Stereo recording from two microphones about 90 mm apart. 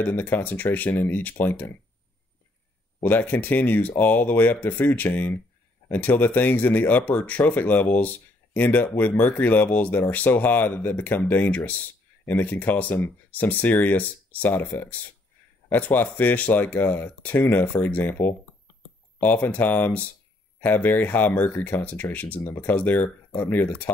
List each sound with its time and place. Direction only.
0.0 s speech: 20° left (ahead or behind)
3.0 s speech: 20° left (ahead or behind)